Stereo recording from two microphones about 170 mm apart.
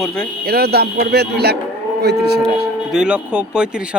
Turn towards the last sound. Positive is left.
turn(degrees=-5)  # may be behind; listen again after turning